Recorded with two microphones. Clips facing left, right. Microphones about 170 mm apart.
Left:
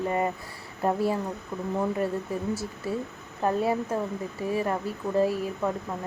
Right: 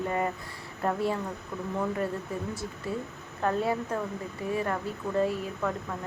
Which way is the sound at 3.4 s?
25° left (ahead or behind).